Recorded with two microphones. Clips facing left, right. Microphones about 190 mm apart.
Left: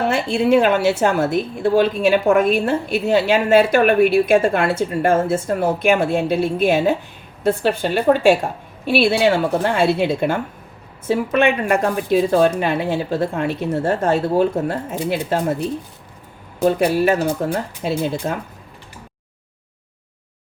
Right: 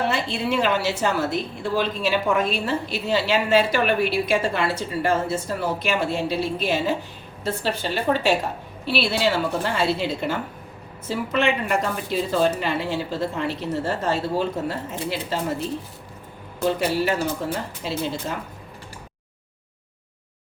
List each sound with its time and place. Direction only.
0.1 s a woman's voice: 50° left (ahead or behind)
16.6 s a woman's voice: 55° left (ahead or behind)